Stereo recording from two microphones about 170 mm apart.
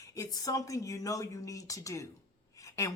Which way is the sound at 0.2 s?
20° left (ahead or behind).